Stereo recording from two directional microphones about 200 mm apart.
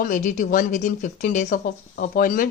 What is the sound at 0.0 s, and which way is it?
Speech, 40° left (ahead or behind).